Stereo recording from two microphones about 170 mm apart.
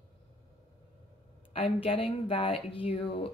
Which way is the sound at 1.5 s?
35° left (ahead or behind).